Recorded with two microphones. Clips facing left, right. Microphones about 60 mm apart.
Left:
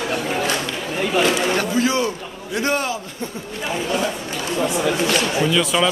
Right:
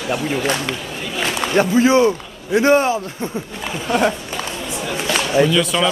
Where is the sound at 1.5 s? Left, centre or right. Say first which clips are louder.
Right 6 dB; right.